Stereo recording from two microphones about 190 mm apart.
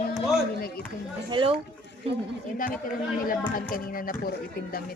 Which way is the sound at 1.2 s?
25° right (ahead or behind).